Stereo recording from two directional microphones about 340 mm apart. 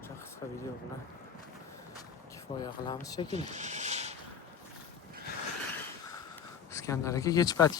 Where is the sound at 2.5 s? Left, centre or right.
Centre.